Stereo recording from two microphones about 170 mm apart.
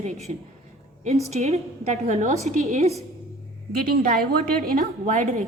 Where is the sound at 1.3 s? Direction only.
40° right (ahead or behind).